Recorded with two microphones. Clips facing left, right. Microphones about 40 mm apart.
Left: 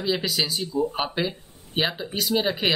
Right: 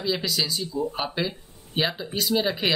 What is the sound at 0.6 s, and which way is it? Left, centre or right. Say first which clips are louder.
Speech: left 3 dB; left.